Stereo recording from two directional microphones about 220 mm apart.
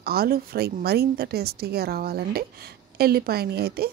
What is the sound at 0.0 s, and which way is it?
A woman's voice, 45° right (ahead or behind).